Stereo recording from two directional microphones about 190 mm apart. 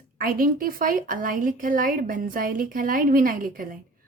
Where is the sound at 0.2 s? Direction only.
50° right (ahead or behind).